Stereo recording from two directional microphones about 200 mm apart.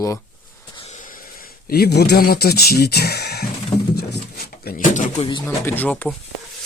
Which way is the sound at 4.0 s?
55° left (ahead or behind).